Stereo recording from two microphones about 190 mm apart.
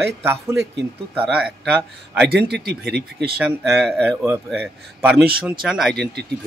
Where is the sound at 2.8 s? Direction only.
Centre (ahead or behind).